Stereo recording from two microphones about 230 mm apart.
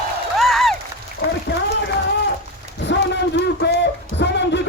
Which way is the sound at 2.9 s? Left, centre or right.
Left.